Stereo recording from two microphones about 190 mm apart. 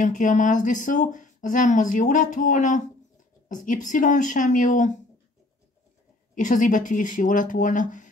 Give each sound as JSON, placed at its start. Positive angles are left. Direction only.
{"t": 0.0, "sound": "speech", "side_deg": 40}
{"t": 6.3, "sound": "speech", "side_deg": 40}